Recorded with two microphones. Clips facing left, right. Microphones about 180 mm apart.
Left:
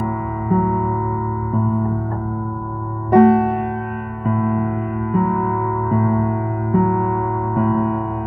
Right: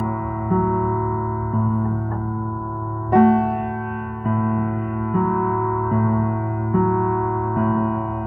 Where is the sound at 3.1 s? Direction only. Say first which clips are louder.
Left 3 dB; 70° left (ahead or behind).